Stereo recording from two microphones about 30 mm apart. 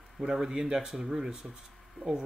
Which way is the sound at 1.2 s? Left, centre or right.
Right.